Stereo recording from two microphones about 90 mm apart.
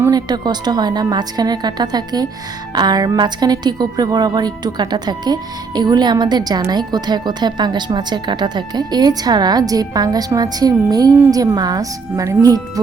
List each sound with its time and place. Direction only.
0.1 s a woman's voice: 50° right (ahead or behind)